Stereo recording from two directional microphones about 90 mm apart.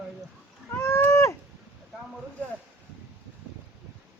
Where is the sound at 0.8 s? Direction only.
35° left (ahead or behind).